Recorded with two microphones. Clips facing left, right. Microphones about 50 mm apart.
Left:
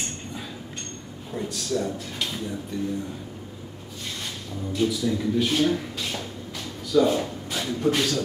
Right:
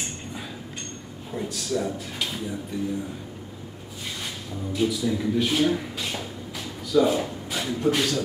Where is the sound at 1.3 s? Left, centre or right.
Centre.